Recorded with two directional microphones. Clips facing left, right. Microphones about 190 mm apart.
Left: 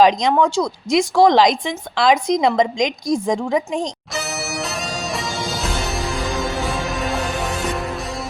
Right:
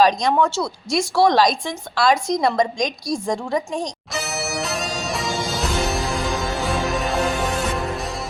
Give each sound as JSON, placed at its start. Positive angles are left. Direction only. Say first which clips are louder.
{"t": 0.0, "sound": "speech", "louder": "left 2 dB", "side_deg": 20}
{"t": 4.1, "sound": "music", "louder": "even", "side_deg": 0}